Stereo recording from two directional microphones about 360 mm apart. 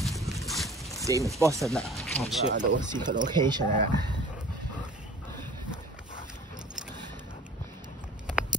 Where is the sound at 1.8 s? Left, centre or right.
Centre.